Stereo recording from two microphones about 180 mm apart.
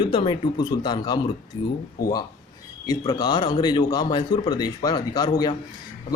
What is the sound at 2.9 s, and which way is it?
A man's voice, 25° left (ahead or behind).